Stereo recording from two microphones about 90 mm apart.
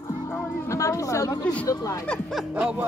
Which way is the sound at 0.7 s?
35° left (ahead or behind).